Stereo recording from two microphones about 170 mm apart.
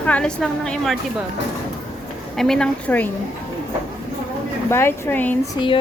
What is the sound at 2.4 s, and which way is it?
Speech, 5° left (ahead or behind).